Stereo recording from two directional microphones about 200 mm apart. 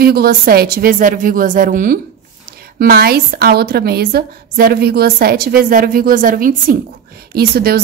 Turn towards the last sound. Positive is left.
turn(degrees=-50)  # may be behind; listen again after turning